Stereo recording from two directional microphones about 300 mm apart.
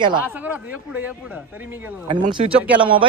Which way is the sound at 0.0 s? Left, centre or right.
Centre.